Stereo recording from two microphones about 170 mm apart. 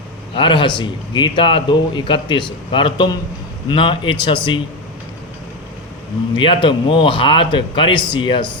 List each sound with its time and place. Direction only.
0.3 s a man's voice: 30° left (ahead or behind)
6.3 s a man's voice: 30° left (ahead or behind)